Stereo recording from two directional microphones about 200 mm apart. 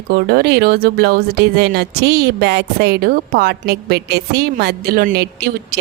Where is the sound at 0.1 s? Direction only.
50° right (ahead or behind).